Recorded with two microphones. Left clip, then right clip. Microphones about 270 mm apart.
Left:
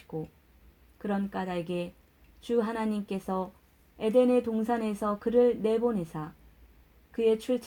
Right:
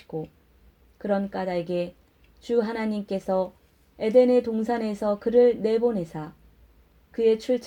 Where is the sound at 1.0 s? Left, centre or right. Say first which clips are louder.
Right 7 dB; left.